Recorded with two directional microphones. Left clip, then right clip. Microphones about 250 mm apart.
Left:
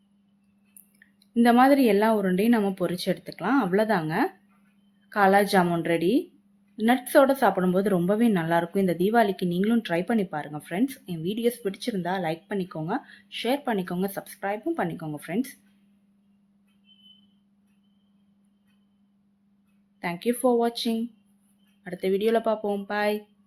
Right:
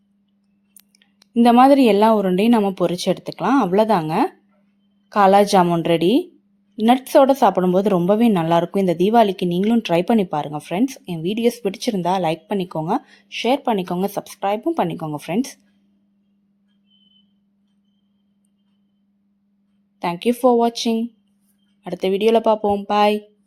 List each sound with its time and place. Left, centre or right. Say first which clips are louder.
0.9 s speech: right 6 dB; right
20.0 s speech: right 7 dB; right